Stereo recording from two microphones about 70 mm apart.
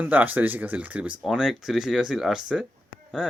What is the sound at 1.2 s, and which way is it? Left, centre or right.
Speech, centre.